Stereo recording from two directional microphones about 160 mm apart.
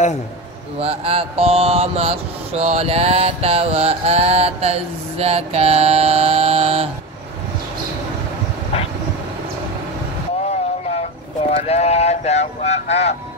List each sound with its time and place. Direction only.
0.7 s mantra: 35° right (ahead or behind)
11.6 s speech: 40° left (ahead or behind)